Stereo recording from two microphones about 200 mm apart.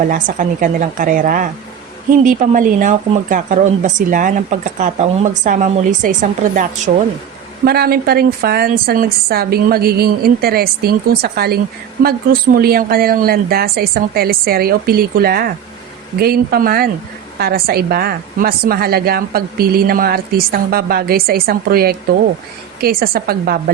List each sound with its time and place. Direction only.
0.1 s a woman's voice: 40° right (ahead or behind)
7.6 s a woman's voice: 50° right (ahead or behind)